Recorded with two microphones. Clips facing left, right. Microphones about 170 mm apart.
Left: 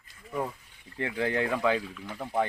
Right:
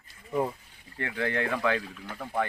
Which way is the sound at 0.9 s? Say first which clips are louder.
Left 1 dB; 10° left (ahead or behind).